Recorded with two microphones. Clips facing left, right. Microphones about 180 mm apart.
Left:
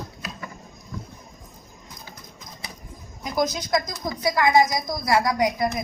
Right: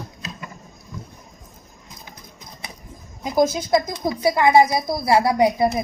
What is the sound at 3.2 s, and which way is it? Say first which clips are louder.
A woman's voice: right 6 dB; 25° right (ahead or behind).